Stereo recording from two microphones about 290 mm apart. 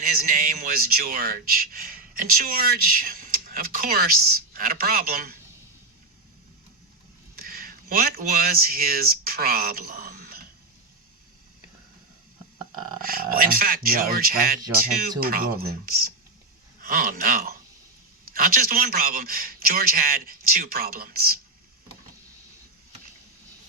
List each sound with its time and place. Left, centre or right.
0.0 s speech: right
7.3 s speech: right
13.0 s speech: right